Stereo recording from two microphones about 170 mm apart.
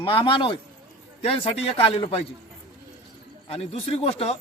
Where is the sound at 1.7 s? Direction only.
35° left (ahead or behind).